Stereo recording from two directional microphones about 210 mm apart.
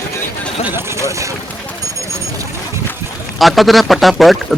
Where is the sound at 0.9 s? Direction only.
15° right (ahead or behind).